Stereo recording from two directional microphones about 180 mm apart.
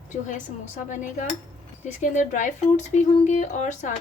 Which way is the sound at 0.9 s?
45° left (ahead or behind).